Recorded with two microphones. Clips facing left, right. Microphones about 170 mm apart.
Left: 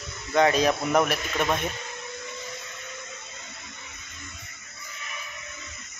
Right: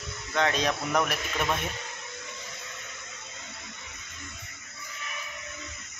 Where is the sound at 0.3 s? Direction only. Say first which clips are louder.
Left 6 dB; 10° left (ahead or behind).